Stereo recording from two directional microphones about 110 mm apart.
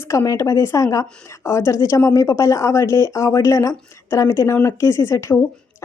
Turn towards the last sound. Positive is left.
turn(degrees=25)  # may be behind; listen again after turning